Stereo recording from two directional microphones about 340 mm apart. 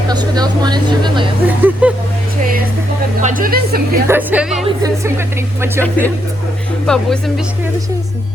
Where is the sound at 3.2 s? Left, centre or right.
Right.